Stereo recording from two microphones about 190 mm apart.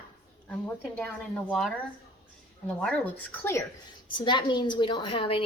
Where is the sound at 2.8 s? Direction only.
5° left (ahead or behind).